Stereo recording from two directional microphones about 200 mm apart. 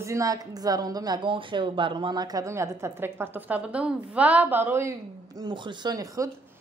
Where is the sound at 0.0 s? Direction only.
15° right (ahead or behind).